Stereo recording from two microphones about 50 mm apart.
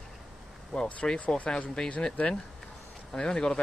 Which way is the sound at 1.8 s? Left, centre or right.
Centre.